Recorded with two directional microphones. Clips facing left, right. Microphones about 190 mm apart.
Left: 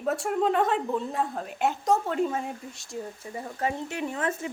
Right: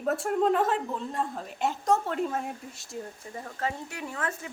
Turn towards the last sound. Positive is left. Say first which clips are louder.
# left 5 dB
turn(degrees=20)  # may be behind; listen again after turning